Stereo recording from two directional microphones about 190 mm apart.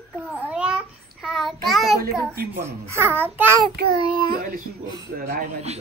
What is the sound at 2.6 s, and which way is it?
A child's voice, 15° right (ahead or behind).